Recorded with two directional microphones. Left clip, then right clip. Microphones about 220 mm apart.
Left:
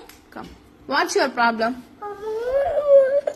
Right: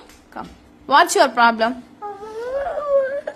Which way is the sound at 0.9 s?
20° right (ahead or behind).